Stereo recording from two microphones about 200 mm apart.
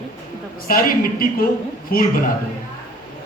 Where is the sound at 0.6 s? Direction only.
45° left (ahead or behind).